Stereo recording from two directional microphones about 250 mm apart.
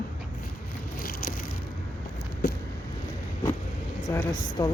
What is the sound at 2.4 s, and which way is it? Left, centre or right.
Vehicle, left.